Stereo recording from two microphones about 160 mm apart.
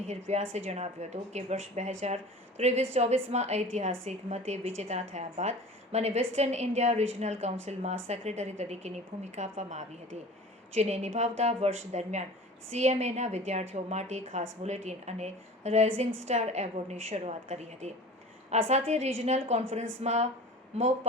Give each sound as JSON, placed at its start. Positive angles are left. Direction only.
{"t": 0.1, "sound": "a woman's voice", "side_deg": -45}